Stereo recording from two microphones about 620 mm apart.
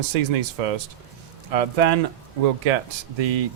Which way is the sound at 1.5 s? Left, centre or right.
Right.